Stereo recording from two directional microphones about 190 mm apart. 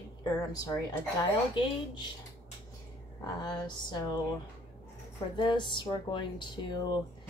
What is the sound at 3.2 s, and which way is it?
Speech, 20° left (ahead or behind).